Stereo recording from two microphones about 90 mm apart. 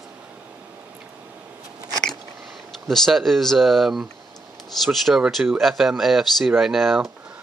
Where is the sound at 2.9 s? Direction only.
Centre (ahead or behind).